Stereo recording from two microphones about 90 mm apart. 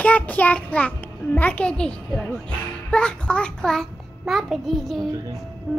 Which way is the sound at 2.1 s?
Centre (ahead or behind).